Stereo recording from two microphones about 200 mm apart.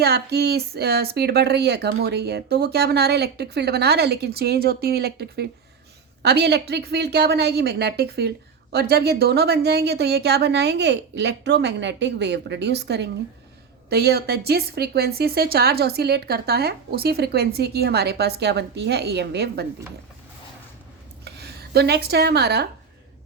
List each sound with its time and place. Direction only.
0.0 s a woman's voice: 55° right (ahead or behind)
21.2 s speech: 55° right (ahead or behind)